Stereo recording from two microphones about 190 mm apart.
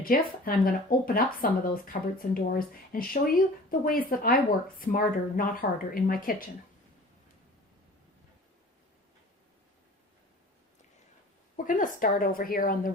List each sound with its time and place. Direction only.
0.0 s speech: 50° left (ahead or behind)
11.5 s speech: 45° left (ahead or behind)